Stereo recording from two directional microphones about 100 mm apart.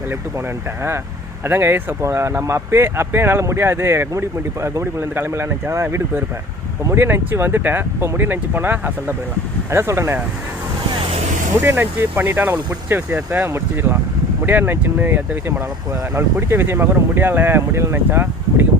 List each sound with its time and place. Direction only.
1.5 s speech: 25° right (ahead or behind)
11.6 s speech: 25° right (ahead or behind)